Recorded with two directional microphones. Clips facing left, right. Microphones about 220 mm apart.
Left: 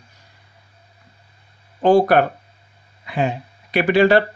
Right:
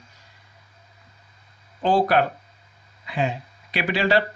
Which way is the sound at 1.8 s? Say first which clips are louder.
Left 6 dB; 50° left (ahead or behind).